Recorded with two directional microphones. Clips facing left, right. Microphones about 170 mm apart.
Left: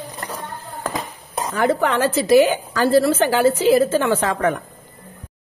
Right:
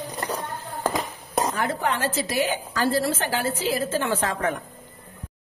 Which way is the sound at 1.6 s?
80° left.